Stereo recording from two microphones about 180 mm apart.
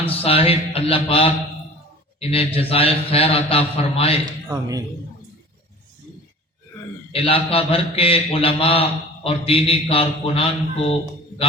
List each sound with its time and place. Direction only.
0.0 s a man's voice: 30° left (ahead or behind)
4.4 s speech: 20° right (ahead or behind)
7.1 s a man's voice: 30° left (ahead or behind)